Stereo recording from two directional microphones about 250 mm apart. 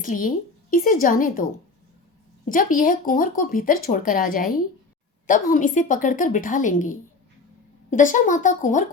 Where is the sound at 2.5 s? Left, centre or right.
Left.